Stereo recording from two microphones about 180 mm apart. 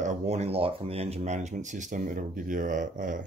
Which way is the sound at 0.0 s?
40° right (ahead or behind).